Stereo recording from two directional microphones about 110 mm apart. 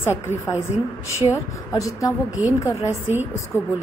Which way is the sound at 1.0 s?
30° left (ahead or behind).